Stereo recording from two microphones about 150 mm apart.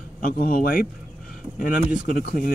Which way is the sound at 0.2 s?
75° left (ahead or behind).